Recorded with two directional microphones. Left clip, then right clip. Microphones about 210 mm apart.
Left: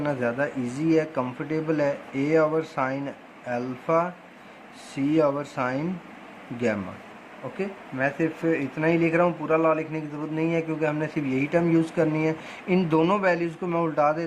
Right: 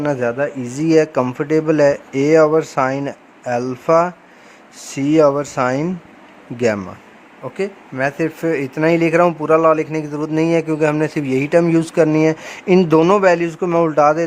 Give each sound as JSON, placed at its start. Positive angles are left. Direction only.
{"t": 0.0, "sound": "speech", "side_deg": -40}
{"t": 7.6, "sound": "speech", "side_deg": -50}